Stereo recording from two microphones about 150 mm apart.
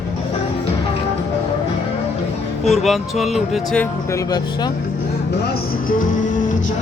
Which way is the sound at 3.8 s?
20° left (ahead or behind).